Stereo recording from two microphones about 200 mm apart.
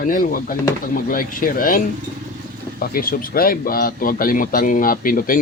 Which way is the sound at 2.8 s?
45° left (ahead or behind).